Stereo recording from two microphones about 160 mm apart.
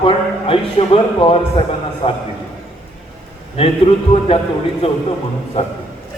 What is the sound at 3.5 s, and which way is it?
A man's voice, 35° left (ahead or behind).